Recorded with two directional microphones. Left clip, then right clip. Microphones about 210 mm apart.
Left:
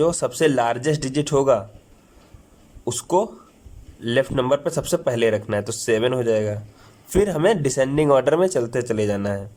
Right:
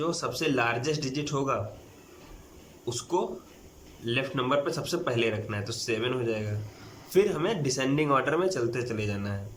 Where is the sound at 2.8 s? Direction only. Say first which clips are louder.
Left 9 dB; 35° left (ahead or behind).